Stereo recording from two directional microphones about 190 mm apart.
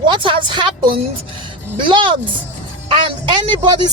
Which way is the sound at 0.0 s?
25° right (ahead or behind).